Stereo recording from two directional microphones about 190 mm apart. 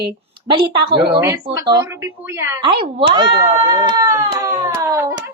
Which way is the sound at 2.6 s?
25° right (ahead or behind).